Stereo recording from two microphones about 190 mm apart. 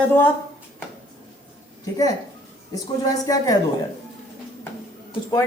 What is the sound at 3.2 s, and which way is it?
Speech, 20° left (ahead or behind).